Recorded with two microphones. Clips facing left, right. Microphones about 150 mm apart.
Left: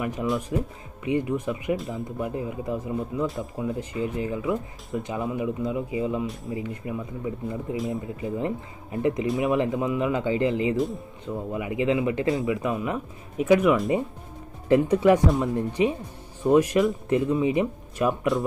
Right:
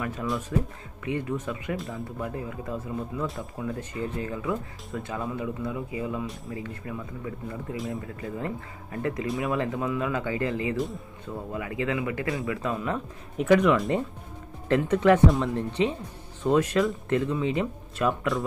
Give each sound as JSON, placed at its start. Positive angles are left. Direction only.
{"t": 0.0, "sound": "speech", "side_deg": 15}